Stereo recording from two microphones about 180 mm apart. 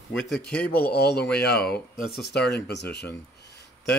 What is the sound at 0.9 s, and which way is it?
Speech, 60° left (ahead or behind).